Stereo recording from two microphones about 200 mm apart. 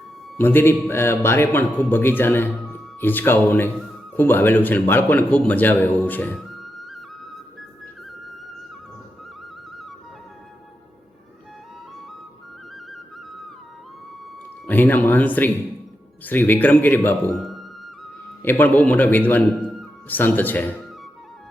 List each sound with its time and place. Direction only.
0.3 s a man's voice: 10° left (ahead or behind)
14.7 s a man's voice: 10° left (ahead or behind)
17.4 s music: centre (ahead or behind)
18.4 s a man's voice: 10° left (ahead or behind)